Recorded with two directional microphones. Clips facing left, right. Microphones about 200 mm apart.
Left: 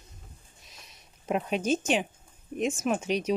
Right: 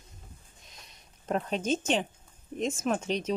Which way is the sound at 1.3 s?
10° left (ahead or behind).